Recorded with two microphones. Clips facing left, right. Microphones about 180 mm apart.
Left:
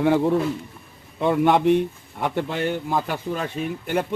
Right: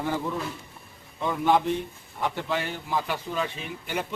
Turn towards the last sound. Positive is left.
turn(degrees=50)  # may be behind; listen again after turning